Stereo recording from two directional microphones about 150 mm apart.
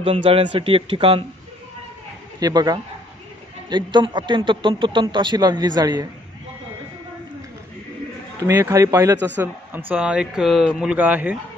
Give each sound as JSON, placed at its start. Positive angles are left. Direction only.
{"t": 0.0, "sound": "speech", "side_deg": -40}
{"t": 2.4, "sound": "speech", "side_deg": -25}
{"t": 8.4, "sound": "speech", "side_deg": -20}